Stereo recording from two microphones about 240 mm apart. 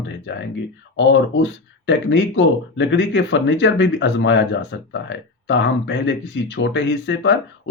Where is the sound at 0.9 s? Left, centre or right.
Left.